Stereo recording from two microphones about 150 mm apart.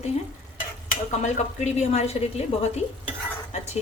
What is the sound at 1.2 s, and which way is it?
A woman's voice, 50° left (ahead or behind).